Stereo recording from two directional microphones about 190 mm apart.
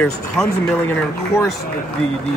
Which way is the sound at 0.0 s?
5° left (ahead or behind).